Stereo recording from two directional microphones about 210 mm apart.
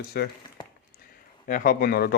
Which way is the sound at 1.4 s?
40° left (ahead or behind).